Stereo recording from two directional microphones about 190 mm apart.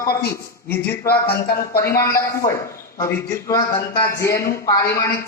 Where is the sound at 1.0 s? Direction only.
55° left (ahead or behind).